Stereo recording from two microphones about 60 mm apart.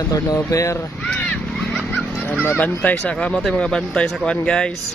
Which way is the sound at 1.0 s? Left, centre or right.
Left.